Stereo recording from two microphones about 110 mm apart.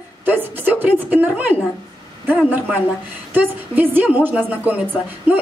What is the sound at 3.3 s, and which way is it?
A woman's voice, 15° right (ahead or behind).